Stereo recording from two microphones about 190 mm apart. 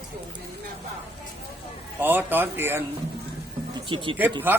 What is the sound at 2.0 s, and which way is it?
Speech, 10° right (ahead or behind).